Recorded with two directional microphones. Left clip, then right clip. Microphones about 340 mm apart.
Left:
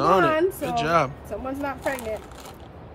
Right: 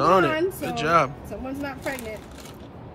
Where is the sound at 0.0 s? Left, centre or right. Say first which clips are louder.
Even; centre.